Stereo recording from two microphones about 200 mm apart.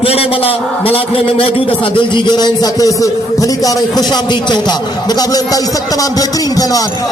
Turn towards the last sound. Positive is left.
turn(degrees=20)  # may be behind; listen again after turning